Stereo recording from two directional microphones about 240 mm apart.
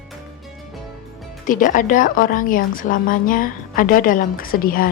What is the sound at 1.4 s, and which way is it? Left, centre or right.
A woman's voice, left.